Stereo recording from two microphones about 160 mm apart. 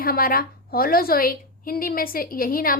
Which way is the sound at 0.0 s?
65° left (ahead or behind).